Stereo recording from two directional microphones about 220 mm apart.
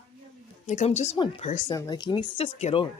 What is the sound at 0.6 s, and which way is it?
Speech, 30° left (ahead or behind).